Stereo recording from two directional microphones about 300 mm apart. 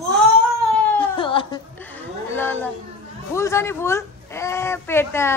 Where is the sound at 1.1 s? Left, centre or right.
Centre.